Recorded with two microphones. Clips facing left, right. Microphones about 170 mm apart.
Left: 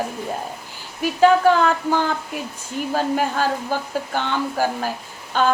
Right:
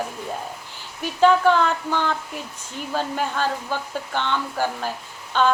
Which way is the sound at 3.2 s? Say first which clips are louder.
Left 3 dB; 40° left (ahead or behind).